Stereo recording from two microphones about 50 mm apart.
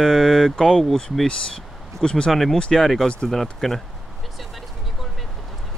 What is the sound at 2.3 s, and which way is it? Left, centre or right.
Speech, centre.